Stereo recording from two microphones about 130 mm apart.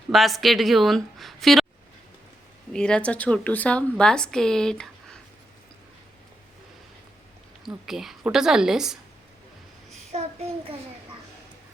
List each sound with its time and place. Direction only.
0.1 s speech: centre (ahead or behind)
2.7 s a woman's voice: 5° left (ahead or behind)
7.6 s speech: 5° right (ahead or behind)
10.1 s child singing: 50° right (ahead or behind)